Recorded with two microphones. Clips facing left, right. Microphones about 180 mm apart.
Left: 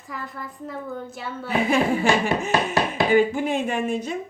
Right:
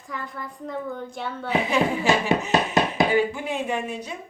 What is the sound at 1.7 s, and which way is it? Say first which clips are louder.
Speech: left 5 dB; 50° left (ahead or behind).